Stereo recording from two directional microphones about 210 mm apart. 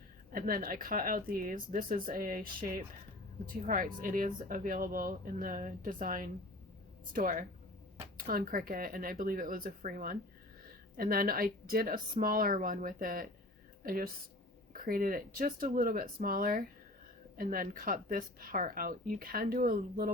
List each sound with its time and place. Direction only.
0.3 s speech: 45° right (ahead or behind)